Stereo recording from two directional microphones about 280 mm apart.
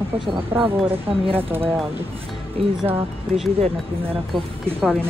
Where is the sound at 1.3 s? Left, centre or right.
Centre.